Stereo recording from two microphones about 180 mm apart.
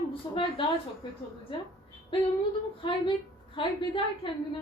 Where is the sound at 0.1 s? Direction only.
30° left (ahead or behind).